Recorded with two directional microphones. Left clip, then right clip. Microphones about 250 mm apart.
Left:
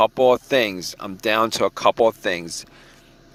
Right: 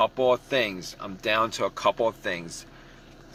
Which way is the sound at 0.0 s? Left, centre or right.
Left.